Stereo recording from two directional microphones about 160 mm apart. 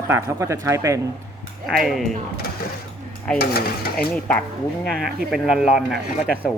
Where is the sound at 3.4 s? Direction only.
70° left (ahead or behind).